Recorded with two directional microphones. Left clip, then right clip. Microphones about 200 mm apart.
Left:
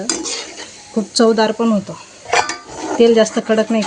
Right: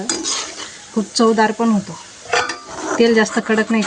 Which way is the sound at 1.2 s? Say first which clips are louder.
Left 1 dB; 20° right (ahead or behind).